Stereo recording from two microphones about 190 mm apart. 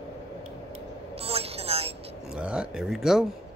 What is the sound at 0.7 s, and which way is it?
Vehicle, 30° right (ahead or behind).